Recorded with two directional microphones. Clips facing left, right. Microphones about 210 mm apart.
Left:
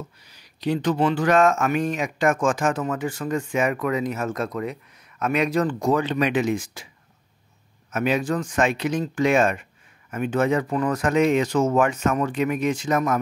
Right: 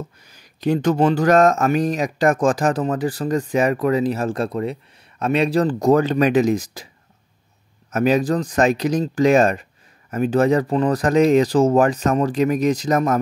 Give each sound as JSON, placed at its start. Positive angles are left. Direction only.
{"t": 0.2, "sound": "speech", "side_deg": -45}
{"t": 7.9, "sound": "speech", "side_deg": -40}